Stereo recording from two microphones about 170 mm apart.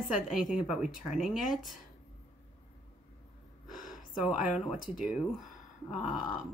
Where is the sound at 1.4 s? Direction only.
50° left (ahead or behind).